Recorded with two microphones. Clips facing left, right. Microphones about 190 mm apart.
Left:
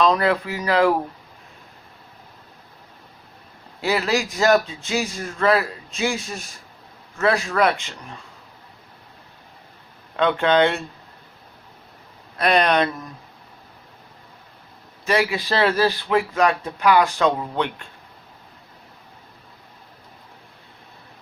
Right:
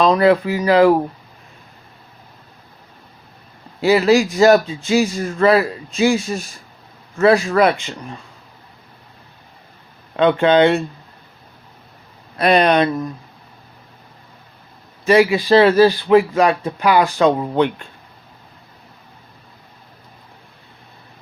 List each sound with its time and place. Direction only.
0.0 s a man's voice: 5° right (ahead or behind)
3.8 s a man's voice: 5° right (ahead or behind)
10.3 s a man's voice: 5° right (ahead or behind)
12.4 s a man's voice: 5° right (ahead or behind)
15.0 s a man's voice: 5° right (ahead or behind)
17.2 s speech: 35° right (ahead or behind)